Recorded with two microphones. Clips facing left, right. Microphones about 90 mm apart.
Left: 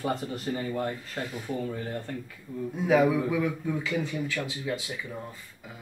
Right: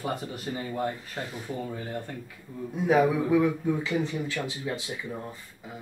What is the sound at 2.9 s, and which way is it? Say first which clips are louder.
A man's voice: right 1 dB; 20° right (ahead or behind).